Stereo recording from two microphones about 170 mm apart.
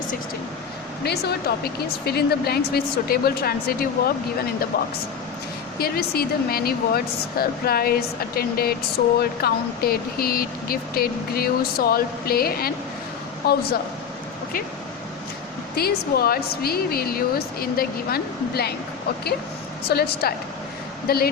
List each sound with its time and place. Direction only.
1.0 s a woman's voice: 70° left (ahead or behind)
5.8 s a woman's voice: 65° left (ahead or behind)
15.7 s speech: 65° left (ahead or behind)
19.9 s a woman's voice: 70° left (ahead or behind)